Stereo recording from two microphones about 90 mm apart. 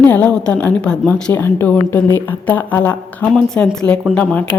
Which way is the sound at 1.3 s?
20° left (ahead or behind).